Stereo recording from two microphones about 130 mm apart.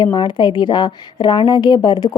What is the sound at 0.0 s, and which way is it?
Speech, 35° left (ahead or behind).